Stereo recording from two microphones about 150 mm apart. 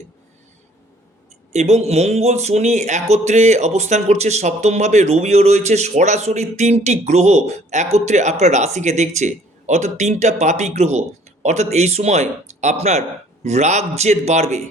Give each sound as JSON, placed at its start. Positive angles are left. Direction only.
{"t": 1.5, "sound": "speech", "side_deg": -45}